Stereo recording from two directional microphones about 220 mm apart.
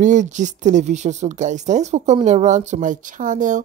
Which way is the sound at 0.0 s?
35° right (ahead or behind).